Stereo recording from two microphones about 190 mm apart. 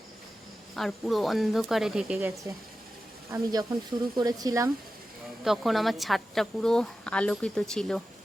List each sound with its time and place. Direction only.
0.8 s a woman's voice: centre (ahead or behind)
3.3 s speech: 20° right (ahead or behind)
5.5 s a woman's voice: centre (ahead or behind)